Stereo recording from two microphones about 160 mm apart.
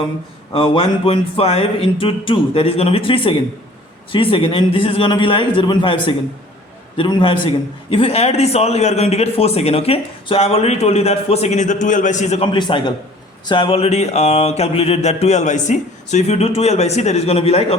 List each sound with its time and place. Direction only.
0.5 s a man's voice: 30° left (ahead or behind)
12.5 s a man's voice: 30° left (ahead or behind)